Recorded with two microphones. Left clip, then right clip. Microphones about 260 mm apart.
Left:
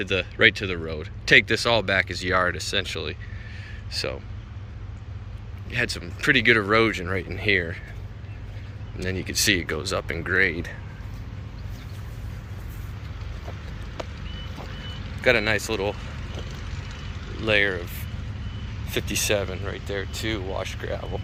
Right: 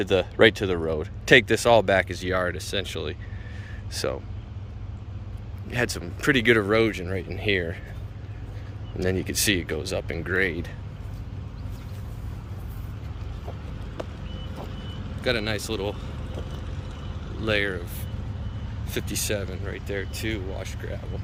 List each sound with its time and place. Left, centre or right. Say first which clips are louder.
0.0 s speech: right 1 dB; centre
5.7 s speech: left 1 dB; centre
9.0 s speech: even; centre
15.2 s speech: left 6 dB; centre
16.4 s vehicle: left 1 dB; right
17.4 s speech: left 4 dB; centre
18.9 s speech: left 5 dB; centre